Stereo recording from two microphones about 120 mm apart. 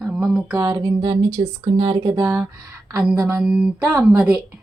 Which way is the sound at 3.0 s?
10° right (ahead or behind).